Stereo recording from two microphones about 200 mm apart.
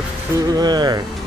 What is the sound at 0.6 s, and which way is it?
Speech, 20° right (ahead or behind).